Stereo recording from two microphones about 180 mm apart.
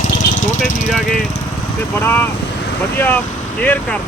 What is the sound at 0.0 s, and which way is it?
Vehicle, 45° left (ahead or behind).